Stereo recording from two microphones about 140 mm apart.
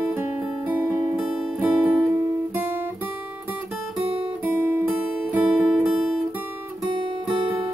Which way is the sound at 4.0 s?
40° right (ahead or behind).